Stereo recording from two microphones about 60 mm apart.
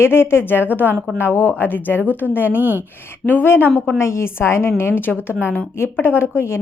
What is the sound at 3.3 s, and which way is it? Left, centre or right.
A woman's voice, left.